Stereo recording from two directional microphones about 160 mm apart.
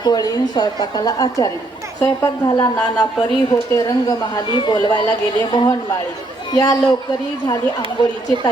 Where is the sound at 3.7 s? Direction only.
20° left (ahead or behind).